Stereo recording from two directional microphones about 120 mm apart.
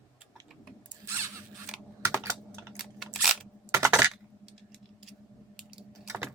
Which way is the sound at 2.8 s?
Centre (ahead or behind).